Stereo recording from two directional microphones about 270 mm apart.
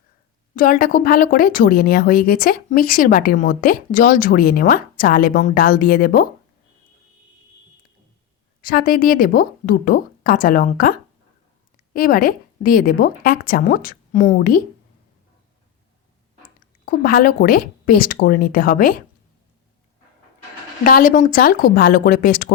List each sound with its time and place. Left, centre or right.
0.5 s speech: left
8.6 s speech: left
11.9 s speech: left
16.4 s speech: left
20.8 s speech: left